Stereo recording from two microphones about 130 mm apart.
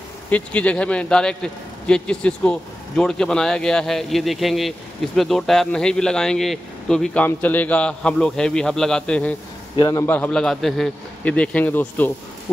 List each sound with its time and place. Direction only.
0.3 s a man's voice: 10° left (ahead or behind)
9.8 s a man's voice: 30° left (ahead or behind)
10.0 s a man's voice: 15° left (ahead or behind)